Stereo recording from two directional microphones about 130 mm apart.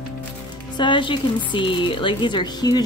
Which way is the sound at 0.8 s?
40° left (ahead or behind).